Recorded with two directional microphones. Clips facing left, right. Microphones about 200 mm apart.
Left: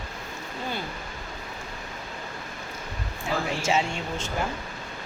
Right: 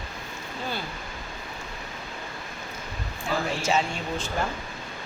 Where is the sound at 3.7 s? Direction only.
20° left (ahead or behind).